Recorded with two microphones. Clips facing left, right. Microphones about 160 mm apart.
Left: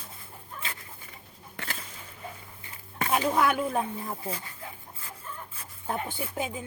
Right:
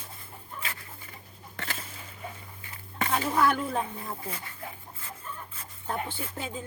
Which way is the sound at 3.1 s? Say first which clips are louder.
Left 1 dB; 15° left (ahead or behind).